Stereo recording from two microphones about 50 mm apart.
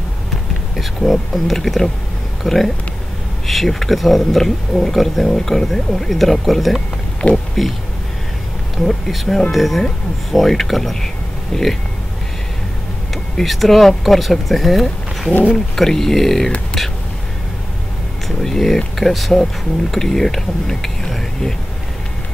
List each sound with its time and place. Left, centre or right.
0.7 s speech: centre
8.7 s speech: centre
13.1 s speech: centre
18.4 s speech: centre